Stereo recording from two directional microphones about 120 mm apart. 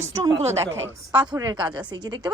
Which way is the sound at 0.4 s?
20° right (ahead or behind).